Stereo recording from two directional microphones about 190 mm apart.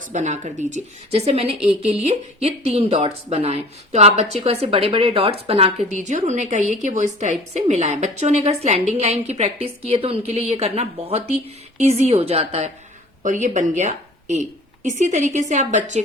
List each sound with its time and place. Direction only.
0.0 s a woman's voice: 40° right (ahead or behind)